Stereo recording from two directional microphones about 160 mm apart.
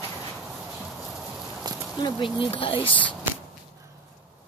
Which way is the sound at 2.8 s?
10° left (ahead or behind).